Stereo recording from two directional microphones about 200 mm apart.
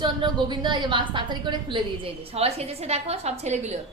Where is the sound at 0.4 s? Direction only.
20° right (ahead or behind).